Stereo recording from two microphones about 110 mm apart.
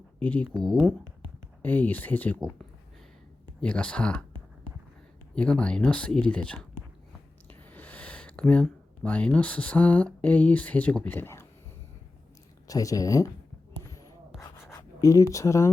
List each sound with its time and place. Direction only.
0.2 s speech: 15° left (ahead or behind)
1.6 s speech: 15° left (ahead or behind)
3.6 s speech: 10° left (ahead or behind)
5.3 s speech: 10° left (ahead or behind)
7.7 s a sound: 15° left (ahead or behind)
9.0 s speech: 10° left (ahead or behind)
12.6 s speech: 30° left (ahead or behind)
13.7 s rub: 30° left (ahead or behind)
15.0 s speech: 30° left (ahead or behind)